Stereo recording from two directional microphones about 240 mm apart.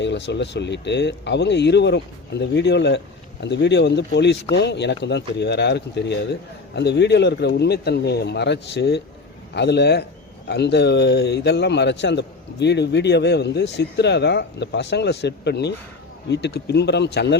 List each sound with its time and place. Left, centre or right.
0.0 s speech: left